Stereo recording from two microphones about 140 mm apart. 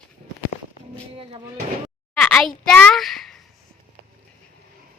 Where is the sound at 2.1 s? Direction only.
5° left (ahead or behind).